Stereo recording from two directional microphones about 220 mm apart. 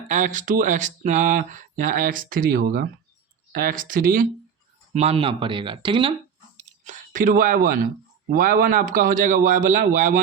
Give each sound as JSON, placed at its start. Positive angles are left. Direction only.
{"t": 0.1, "sound": "speech", "side_deg": -35}
{"t": 4.9, "sound": "speech", "side_deg": -25}
{"t": 6.6, "sound": "a sound", "side_deg": -35}
{"t": 8.3, "sound": "speech", "side_deg": -40}